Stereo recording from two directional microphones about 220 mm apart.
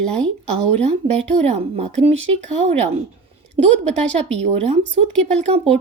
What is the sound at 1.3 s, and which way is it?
A woman's voice, 30° right (ahead or behind).